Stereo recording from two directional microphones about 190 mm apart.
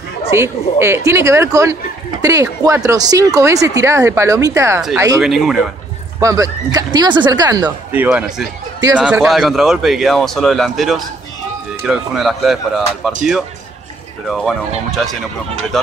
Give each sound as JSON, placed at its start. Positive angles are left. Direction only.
{"t": 0.3, "sound": "speech", "side_deg": -15}
{"t": 5.2, "sound": "a man's voice", "side_deg": 0}
{"t": 6.1, "sound": "speech", "side_deg": -15}
{"t": 7.9, "sound": "a man's voice", "side_deg": -10}
{"t": 15.7, "sound": "a man's voice", "side_deg": 0}